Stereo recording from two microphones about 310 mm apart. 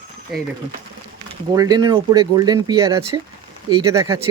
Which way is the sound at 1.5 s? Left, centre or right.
Centre.